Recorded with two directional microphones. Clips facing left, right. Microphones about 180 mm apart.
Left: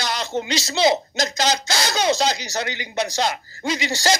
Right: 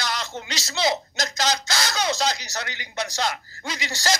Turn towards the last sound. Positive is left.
turn(degrees=25)  # may be behind; listen again after turning